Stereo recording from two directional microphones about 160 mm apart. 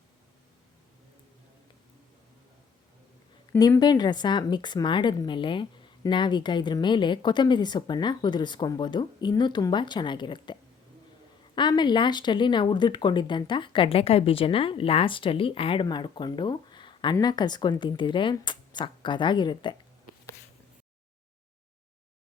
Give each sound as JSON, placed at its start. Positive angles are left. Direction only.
{"t": 3.6, "sound": "speech", "side_deg": 25}